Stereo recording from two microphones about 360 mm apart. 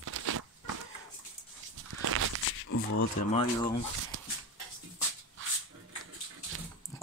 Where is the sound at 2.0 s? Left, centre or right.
Right.